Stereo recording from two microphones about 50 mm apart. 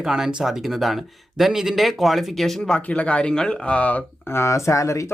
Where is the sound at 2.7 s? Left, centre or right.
Left.